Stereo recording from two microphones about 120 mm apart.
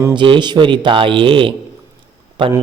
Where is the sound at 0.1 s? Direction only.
40° right (ahead or behind).